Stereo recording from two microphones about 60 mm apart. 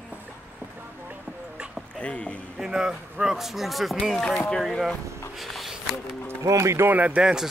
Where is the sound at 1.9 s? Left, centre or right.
Centre.